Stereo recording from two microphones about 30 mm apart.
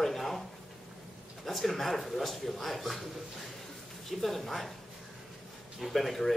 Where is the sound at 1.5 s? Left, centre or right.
Centre.